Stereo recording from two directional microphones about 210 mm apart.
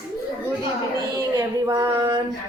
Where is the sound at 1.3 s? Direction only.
20° right (ahead or behind).